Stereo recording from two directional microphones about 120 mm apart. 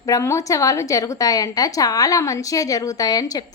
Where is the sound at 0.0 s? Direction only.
25° left (ahead or behind).